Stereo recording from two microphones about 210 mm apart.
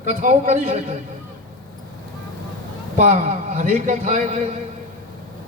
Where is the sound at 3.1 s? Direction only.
35° right (ahead or behind).